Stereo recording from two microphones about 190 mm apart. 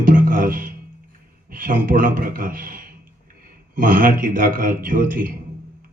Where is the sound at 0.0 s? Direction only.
45° right (ahead or behind).